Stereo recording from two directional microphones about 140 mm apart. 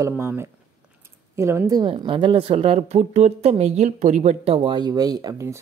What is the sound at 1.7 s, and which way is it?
A woman's voice, 30° right (ahead or behind).